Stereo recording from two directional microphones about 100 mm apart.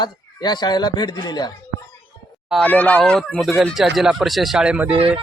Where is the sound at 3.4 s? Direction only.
Centre (ahead or behind).